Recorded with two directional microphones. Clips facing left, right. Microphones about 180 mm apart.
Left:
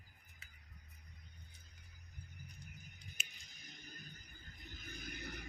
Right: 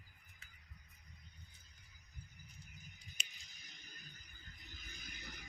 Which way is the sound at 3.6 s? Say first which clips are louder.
Left 6 dB; 50° left (ahead or behind).